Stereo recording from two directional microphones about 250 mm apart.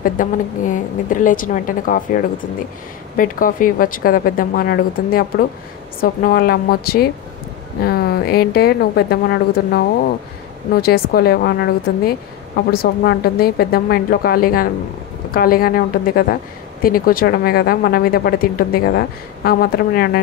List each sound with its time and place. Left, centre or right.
0.0 s speech: left
3.2 s speech: left